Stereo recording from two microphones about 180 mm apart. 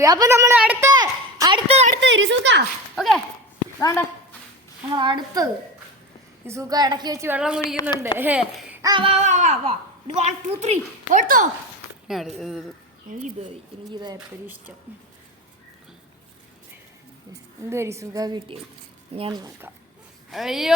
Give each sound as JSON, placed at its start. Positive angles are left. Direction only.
{"t": 0.0, "sound": "a woman's voice", "side_deg": -20}
{"t": 0.9, "sound": "a sound", "side_deg": -20}
{"t": 1.7, "sound": "a woman's voice", "side_deg": -40}
{"t": 2.0, "sound": "a woman's voice", "side_deg": -90}
{"t": 2.9, "sound": "speech", "side_deg": 0}
{"t": 3.8, "sound": "speech", "side_deg": 15}
{"t": 4.9, "sound": "a woman's voice", "side_deg": -25}
{"t": 8.8, "sound": "a woman's voice", "side_deg": -25}
{"t": 12.0, "sound": "speech", "side_deg": 0}
{"t": 13.9, "sound": "a woman's voice", "side_deg": -25}
{"t": 17.6, "sound": "a woman's voice", "side_deg": -15}
{"t": 20.3, "sound": "speech", "side_deg": 0}